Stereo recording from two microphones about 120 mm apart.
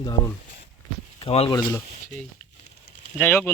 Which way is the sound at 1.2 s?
55° left (ahead or behind).